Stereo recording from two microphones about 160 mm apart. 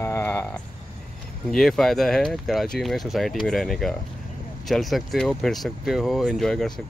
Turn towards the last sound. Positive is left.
turn(degrees=0)  # may be behind; listen again after turning